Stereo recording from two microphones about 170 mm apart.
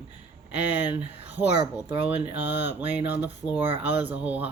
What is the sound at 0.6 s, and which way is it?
Speech, 10° right (ahead or behind).